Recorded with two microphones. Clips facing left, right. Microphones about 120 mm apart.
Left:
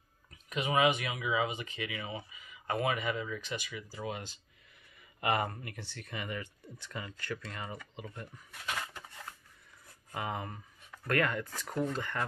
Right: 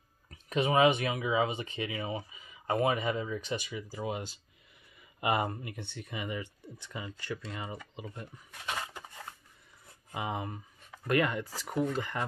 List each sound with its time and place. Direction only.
0.3 s speech: 35° right (ahead or behind); by 7.8 s 10° right (ahead or behind)
7.9 s a sound: 10° right (ahead or behind)
10.1 s speech: 15° right (ahead or behind)